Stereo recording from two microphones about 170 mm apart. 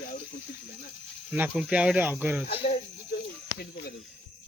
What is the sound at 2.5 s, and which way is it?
Speech, 35° left (ahead or behind).